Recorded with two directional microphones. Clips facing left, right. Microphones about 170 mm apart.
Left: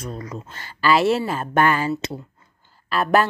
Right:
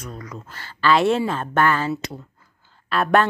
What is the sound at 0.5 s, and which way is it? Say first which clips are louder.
Speech: even; 15° left (ahead or behind).